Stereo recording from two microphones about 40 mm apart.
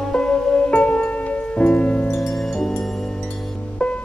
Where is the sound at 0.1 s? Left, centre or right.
Left.